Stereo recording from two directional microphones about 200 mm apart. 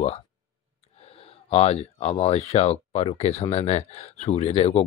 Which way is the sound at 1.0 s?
30° left (ahead or behind).